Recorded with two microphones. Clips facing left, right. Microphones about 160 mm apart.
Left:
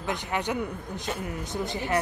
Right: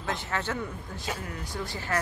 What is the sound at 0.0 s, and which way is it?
Speech, 15° left (ahead or behind).